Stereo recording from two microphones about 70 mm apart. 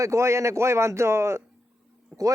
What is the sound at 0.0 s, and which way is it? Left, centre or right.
Speech, right.